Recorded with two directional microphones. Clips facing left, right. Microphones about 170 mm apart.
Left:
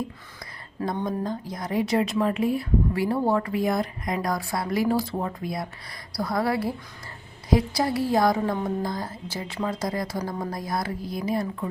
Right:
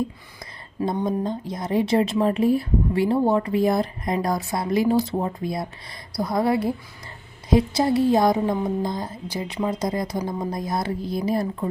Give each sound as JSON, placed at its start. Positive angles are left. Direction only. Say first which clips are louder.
{"t": 1.0, "sound": "speech", "louder": "right 3 dB", "side_deg": -25}